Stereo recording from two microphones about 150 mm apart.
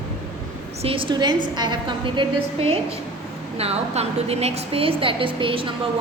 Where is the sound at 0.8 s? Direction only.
35° right (ahead or behind).